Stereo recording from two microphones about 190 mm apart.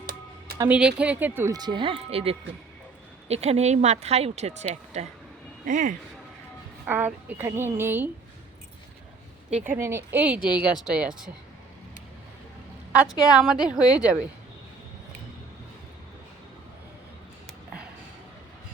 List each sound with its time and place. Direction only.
0.0 s music: 55° right (ahead or behind)
0.6 s speech: 5° right (ahead or behind); by 6.0 s 45° right (ahead or behind)
6.8 s speech: 10° right (ahead or behind)
9.6 s speech: 10° right (ahead or behind)
13.3 s speech: 5° right (ahead or behind)